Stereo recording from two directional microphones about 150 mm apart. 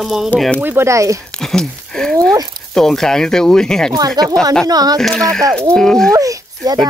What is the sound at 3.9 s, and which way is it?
Speech, 25° right (ahead or behind).